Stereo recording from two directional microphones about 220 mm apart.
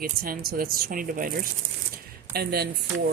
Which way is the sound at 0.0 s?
40° right (ahead or behind).